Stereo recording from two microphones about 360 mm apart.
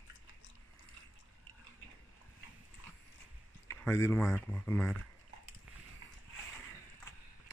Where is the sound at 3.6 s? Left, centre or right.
Centre.